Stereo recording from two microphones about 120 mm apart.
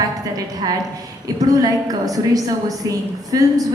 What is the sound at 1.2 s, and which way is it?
A woman's voice, 30° right (ahead or behind).